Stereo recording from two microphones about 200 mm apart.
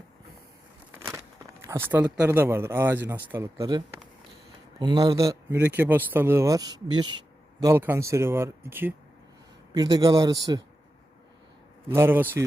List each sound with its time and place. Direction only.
0.9 s a sound: 15° right (ahead or behind)
1.6 s a man's voice: 10° right (ahead or behind)
11.9 s speech: 10° right (ahead or behind)